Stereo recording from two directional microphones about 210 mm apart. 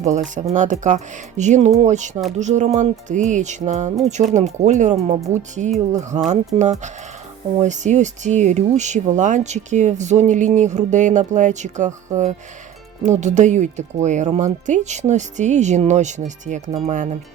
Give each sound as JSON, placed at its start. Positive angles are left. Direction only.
{"t": 0.0, "sound": "speech", "side_deg": -35}
{"t": 13.0, "sound": "speech", "side_deg": -35}